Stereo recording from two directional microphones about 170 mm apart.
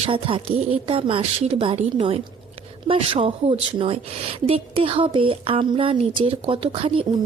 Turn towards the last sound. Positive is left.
turn(degrees=-30)  # may be behind; listen again after turning